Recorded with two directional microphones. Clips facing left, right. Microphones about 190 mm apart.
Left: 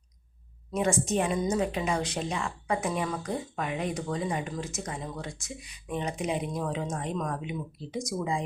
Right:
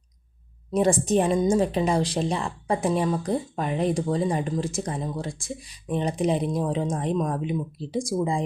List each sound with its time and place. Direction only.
0.7 s speech: 35° right (ahead or behind)